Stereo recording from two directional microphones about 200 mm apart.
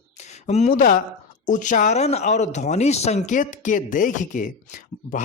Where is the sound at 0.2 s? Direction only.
35° left (ahead or behind).